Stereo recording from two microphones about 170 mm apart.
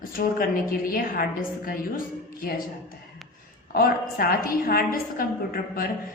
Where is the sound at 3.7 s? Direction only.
60° left (ahead or behind).